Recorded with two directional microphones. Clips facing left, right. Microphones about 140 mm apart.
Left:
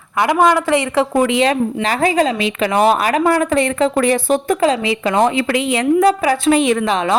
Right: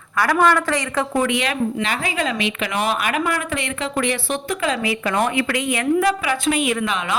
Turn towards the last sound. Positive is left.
turn(degrees=35)  # may be behind; listen again after turning